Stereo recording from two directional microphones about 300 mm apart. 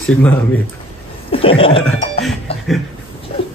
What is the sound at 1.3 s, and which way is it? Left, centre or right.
Speech, centre.